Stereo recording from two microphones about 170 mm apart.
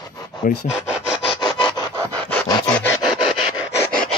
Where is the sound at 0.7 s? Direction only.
5° right (ahead or behind).